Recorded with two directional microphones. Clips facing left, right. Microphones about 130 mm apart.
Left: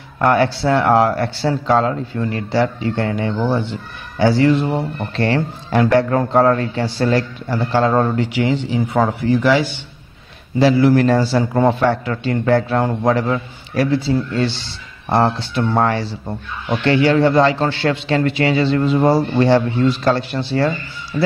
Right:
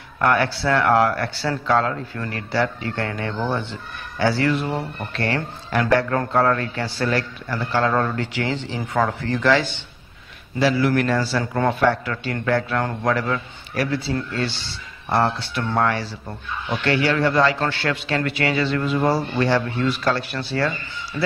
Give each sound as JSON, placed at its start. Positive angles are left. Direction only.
{"t": 0.2, "sound": "a man's voice", "side_deg": 25}
{"t": 8.2, "sound": "speech", "side_deg": 15}
{"t": 11.0, "sound": "a man's voice", "side_deg": 30}